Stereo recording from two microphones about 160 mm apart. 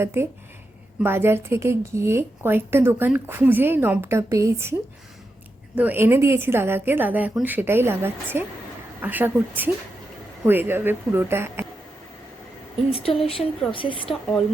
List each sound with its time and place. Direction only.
0.0 s a woman's voice: 15° right (ahead or behind)
5.7 s a woman's voice: 10° right (ahead or behind)
12.9 s speech: 35° left (ahead or behind)
14.1 s speech: 5° left (ahead or behind)